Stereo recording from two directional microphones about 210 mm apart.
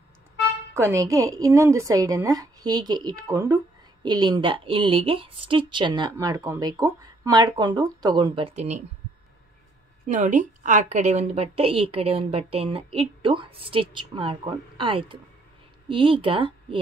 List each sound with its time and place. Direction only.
0.7 s a woman's voice: 15° right (ahead or behind); by 8.8 s 30° right (ahead or behind)
10.0 s a woman's voice: 35° right (ahead or behind)